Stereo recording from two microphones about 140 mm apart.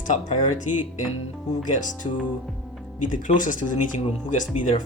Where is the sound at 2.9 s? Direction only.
65° left (ahead or behind).